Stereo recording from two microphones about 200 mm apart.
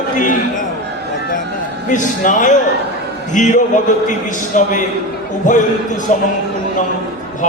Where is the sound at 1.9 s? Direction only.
40° left (ahead or behind).